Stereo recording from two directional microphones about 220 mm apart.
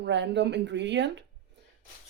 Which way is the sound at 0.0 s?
50° right (ahead or behind).